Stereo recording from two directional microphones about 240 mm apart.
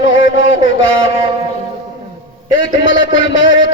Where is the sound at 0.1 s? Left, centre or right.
Left.